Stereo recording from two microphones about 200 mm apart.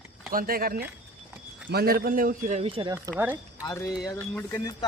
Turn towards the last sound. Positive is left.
turn(degrees=15)  # may be behind; listen again after turning